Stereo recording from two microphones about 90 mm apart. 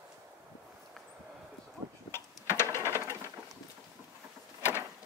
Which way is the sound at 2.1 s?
30° left (ahead or behind).